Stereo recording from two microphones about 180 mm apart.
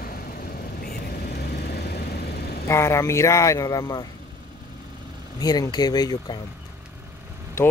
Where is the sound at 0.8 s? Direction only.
65° left (ahead or behind).